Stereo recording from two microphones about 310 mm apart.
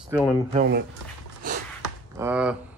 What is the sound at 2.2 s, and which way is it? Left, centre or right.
Speech, centre.